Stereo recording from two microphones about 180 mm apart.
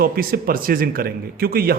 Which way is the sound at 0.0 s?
55° right (ahead or behind).